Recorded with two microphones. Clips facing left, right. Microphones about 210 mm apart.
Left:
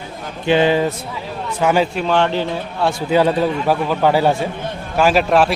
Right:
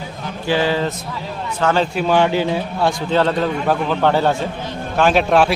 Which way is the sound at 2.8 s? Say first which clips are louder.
Left 2 dB; 10° left (ahead or behind).